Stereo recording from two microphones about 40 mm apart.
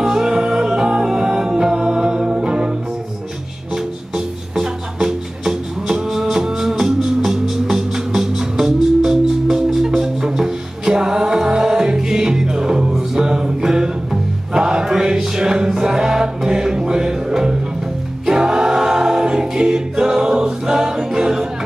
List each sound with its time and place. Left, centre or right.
0.0 s music: centre
3.7 s music: centre
14.5 s chant: centre
18.2 s a capella: centre